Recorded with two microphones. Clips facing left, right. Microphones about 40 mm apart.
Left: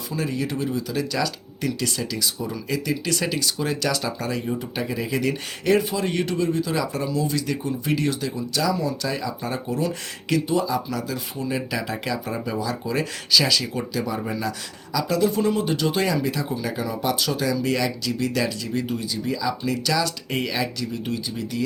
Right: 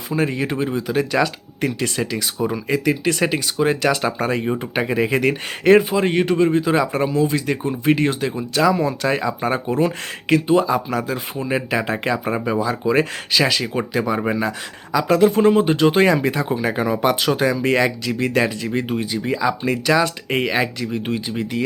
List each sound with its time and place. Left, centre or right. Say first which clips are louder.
0.1 s speech: right 6 dB; right